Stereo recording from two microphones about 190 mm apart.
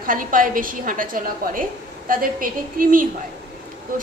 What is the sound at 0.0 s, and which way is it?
A woman's voice, 45° right (ahead or behind).